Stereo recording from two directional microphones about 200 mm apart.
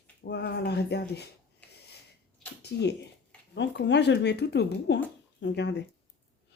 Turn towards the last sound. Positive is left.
turn(degrees=60)  # may be behind; listen again after turning